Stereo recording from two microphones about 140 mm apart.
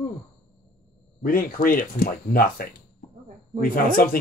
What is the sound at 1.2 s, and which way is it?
Speech, 90° left.